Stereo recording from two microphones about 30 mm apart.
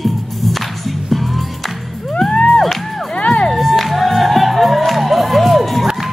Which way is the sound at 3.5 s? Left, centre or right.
Centre.